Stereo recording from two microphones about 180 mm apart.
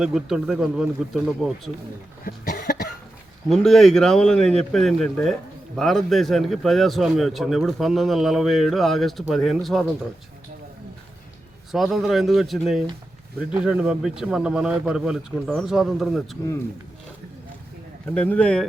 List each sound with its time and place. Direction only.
0.0 s speech: 5° right (ahead or behind)
2.2 s cough: 55° left (ahead or behind)
3.5 s speech: centre (ahead or behind)
11.7 s speech: centre (ahead or behind)
18.1 s speech: 5° left (ahead or behind)